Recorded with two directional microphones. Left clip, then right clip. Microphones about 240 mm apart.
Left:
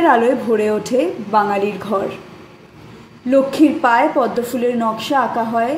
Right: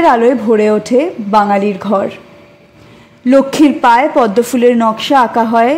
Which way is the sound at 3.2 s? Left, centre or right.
Right.